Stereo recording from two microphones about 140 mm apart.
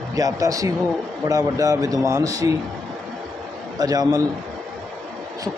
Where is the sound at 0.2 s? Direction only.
25° right (ahead or behind).